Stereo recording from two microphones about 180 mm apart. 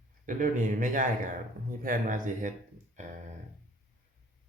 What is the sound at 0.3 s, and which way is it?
Speech, 45° right (ahead or behind).